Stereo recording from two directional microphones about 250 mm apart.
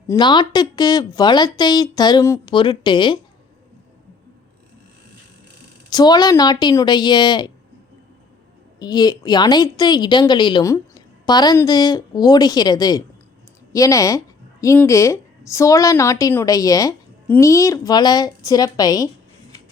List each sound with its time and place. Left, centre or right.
0.1 s a woman's voice: centre
5.9 s a woman's voice: centre
8.8 s a woman's voice: centre